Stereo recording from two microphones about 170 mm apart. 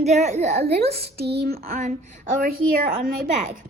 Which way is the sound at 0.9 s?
70° right (ahead or behind).